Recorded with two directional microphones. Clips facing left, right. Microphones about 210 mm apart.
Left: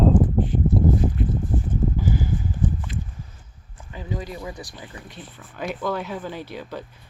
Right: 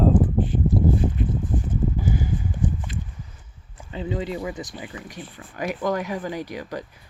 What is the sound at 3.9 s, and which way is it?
Speech, 25° right (ahead or behind).